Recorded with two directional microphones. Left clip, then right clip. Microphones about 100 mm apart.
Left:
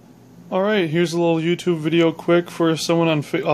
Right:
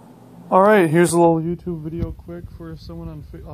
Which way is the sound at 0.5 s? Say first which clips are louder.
Right 6 dB; 5° right (ahead or behind).